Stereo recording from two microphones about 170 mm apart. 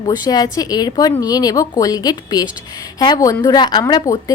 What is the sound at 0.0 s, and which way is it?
Speech, 25° left (ahead or behind).